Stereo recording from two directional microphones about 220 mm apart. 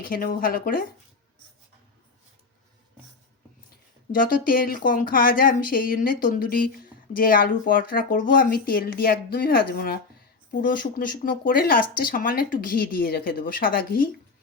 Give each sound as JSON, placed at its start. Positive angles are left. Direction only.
{"t": 0.0, "sound": "a woman's voice", "side_deg": 40}
{"t": 4.1, "sound": "a woman's voice", "side_deg": 40}